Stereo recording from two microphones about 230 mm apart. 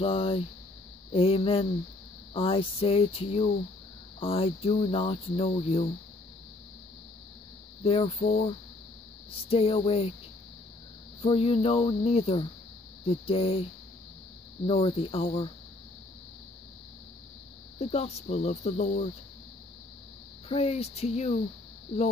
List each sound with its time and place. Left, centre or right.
0.0 s speech: left
7.8 s speech: left
11.1 s speech: left
14.7 s speech: left
17.7 s speech: left
20.4 s speech: left